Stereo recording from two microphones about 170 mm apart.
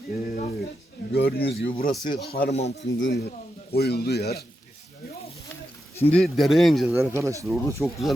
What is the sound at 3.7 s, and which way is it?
Speech, 70° left (ahead or behind).